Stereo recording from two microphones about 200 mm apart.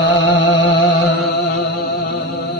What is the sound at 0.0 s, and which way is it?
Music, 60° left (ahead or behind).